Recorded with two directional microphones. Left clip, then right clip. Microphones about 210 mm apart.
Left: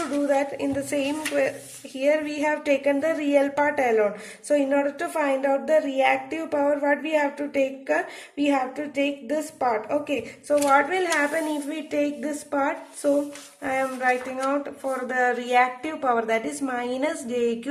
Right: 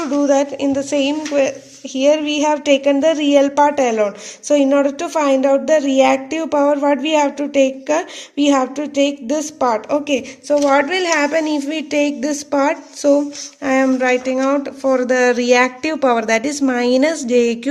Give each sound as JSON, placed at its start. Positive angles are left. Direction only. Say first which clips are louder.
{"t": 0.3, "sound": "speech", "louder": "right 8 dB", "side_deg": -25}
{"t": 4.4, "sound": "speech", "louder": "right 8 dB", "side_deg": -35}